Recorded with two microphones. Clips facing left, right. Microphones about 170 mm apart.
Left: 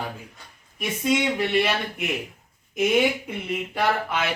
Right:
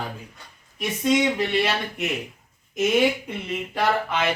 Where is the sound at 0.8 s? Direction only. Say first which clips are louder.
Right 2 dB; 10° left (ahead or behind).